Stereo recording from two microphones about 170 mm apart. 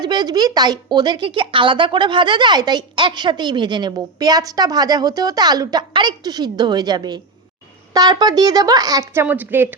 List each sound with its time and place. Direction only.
0.0 s a woman's voice: 25° right (ahead or behind)
9.2 s a woman's voice: 10° right (ahead or behind)